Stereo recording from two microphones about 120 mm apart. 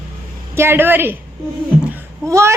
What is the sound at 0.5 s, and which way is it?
A woman's voice, 20° right (ahead or behind).